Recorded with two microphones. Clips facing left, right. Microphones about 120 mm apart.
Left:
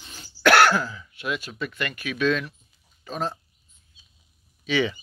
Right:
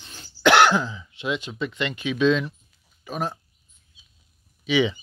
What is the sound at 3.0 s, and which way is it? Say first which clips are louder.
Speech: right 1 dB; 10° right (ahead or behind).